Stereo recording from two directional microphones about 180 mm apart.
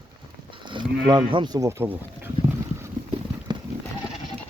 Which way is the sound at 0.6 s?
25° right (ahead or behind).